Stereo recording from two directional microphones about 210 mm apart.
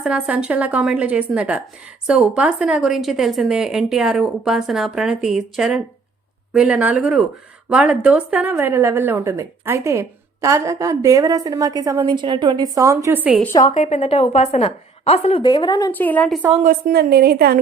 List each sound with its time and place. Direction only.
0.0 s a woman's voice: 5° right (ahead or behind)
13.4 s a woman's voice: 15° left (ahead or behind)
13.7 s a woman's voice: 35° left (ahead or behind)
15.4 s a woman's voice: 20° left (ahead or behind)
15.9 s a woman's voice: 10° left (ahead or behind)
16.6 s a woman's voice: 45° right (ahead or behind)